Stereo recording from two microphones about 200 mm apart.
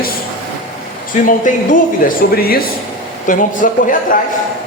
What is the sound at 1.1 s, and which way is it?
Speech, 40° left (ahead or behind).